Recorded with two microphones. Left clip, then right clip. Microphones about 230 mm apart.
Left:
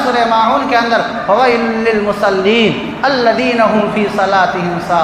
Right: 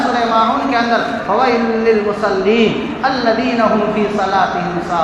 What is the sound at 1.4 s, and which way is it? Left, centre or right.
A man's voice, left.